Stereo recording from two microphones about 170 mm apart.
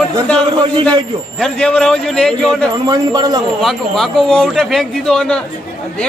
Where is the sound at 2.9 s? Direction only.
25° right (ahead or behind).